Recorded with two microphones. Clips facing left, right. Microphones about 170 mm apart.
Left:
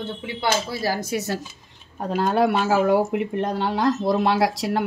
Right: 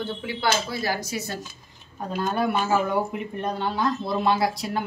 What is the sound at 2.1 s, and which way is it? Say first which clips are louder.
Speech: left 5 dB; 85° left.